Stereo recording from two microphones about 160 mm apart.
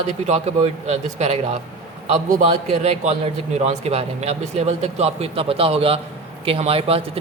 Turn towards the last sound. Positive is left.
turn(degrees=-35)  # may be behind; listen again after turning